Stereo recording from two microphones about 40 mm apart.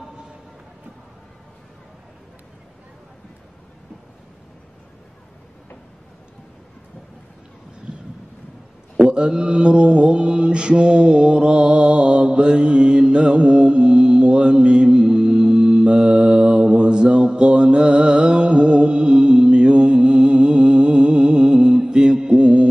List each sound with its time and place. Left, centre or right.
8.9 s mantra: right